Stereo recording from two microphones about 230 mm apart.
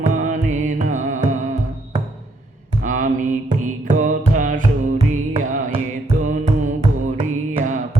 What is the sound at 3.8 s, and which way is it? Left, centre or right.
Music, right.